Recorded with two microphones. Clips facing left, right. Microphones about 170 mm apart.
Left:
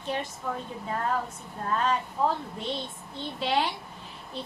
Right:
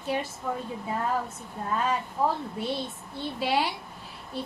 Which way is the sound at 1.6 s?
5° right (ahead or behind).